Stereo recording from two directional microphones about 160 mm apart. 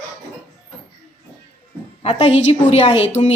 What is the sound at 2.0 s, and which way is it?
A woman's voice, 40° left (ahead or behind).